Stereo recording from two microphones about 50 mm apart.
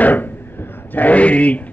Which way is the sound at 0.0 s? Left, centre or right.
Left.